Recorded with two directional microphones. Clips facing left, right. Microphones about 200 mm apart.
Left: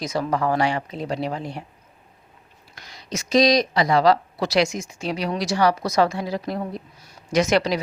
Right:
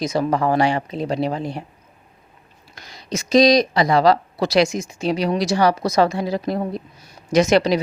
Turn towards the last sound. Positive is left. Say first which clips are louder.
# right 4 dB
turn(degrees=-25)  # may be behind; listen again after turning